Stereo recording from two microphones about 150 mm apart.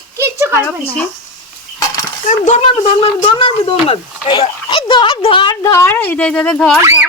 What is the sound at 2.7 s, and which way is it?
Speech, 40° left (ahead or behind).